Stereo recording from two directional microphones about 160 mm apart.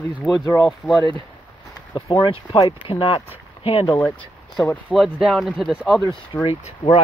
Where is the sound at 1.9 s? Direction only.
25° left (ahead or behind).